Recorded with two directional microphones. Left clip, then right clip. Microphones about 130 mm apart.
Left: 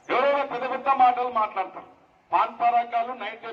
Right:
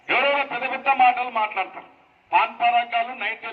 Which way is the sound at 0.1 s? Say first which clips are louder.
Right 2 dB; 30° left (ahead or behind).